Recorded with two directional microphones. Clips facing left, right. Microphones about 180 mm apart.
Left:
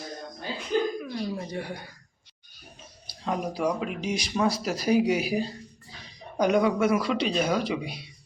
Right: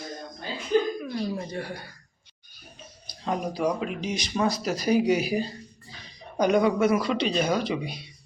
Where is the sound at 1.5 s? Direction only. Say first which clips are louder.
Even; 15° left (ahead or behind).